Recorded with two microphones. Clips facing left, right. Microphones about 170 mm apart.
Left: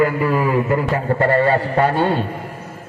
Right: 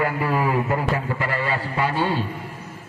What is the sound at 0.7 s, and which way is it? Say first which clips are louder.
A man's voice: left 5 dB; 50° left (ahead or behind).